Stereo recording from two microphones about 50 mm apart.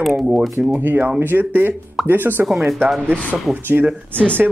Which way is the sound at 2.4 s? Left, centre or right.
Centre.